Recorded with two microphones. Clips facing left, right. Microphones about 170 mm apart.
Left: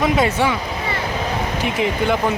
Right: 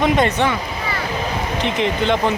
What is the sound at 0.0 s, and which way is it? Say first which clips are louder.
Speech: right 1 dB; 5° left (ahead or behind).